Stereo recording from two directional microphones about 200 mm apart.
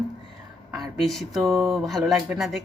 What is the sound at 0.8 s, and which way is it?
Speech, centre (ahead or behind).